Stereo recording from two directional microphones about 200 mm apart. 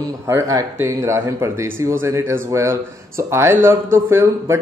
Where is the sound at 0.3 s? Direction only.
15° right (ahead or behind).